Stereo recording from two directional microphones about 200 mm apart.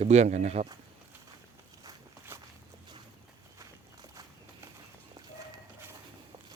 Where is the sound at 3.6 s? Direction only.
20° right (ahead or behind).